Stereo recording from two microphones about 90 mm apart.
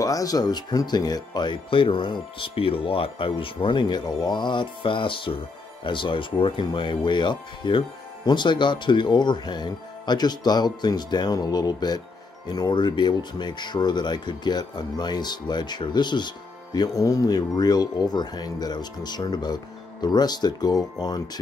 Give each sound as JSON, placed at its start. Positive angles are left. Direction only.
{"t": 0.0, "sound": "speech", "side_deg": 40}
{"t": 4.2, "sound": "music", "side_deg": 55}
{"t": 5.9, "sound": "speech", "side_deg": 65}